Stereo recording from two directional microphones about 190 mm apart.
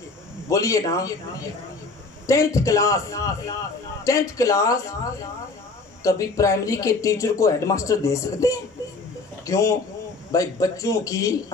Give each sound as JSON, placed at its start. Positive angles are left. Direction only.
{"t": 0.5, "sound": "speech", "side_deg": 15}
{"t": 2.2, "sound": "speech", "side_deg": 15}
{"t": 6.0, "sound": "speech", "side_deg": 15}